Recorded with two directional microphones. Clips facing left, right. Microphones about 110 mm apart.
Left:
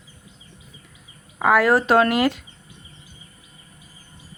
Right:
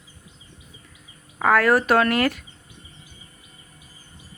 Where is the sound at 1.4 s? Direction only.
15° left (ahead or behind).